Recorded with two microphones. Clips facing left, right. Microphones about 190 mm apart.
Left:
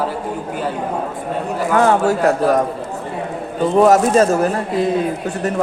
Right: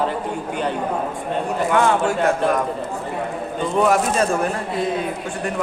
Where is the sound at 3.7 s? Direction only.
40° left (ahead or behind).